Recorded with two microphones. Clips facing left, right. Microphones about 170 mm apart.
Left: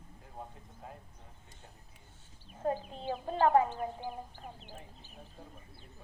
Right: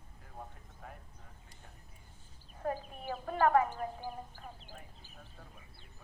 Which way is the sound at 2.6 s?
25° left (ahead or behind).